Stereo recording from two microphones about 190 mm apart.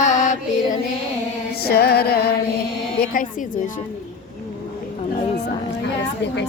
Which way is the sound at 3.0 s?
45° left (ahead or behind).